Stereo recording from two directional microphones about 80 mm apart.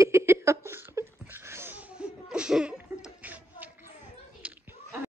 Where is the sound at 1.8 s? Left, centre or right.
Centre.